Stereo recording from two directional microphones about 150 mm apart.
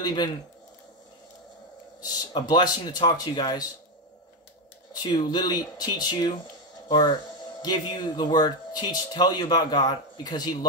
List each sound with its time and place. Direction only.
0.0 s speech: 25° left (ahead or behind)
2.0 s speech: 25° left (ahead or behind)
5.0 s speech: 25° left (ahead or behind)